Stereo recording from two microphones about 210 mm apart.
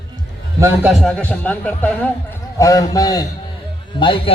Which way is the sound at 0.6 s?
10° right (ahead or behind).